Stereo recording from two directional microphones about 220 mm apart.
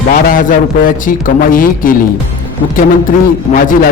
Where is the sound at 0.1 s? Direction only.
40° left (ahead or behind).